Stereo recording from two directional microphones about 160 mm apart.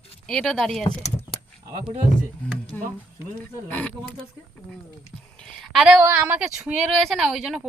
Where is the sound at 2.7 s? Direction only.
Centre (ahead or behind).